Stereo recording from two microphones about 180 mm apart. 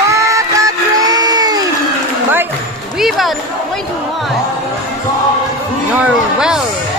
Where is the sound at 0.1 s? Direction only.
15° right (ahead or behind).